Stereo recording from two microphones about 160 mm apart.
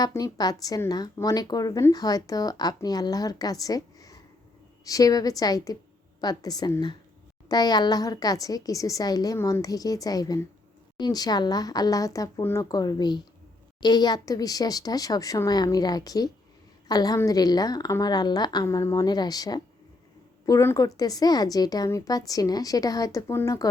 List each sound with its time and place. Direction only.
0.0 s speech: 25° left (ahead or behind)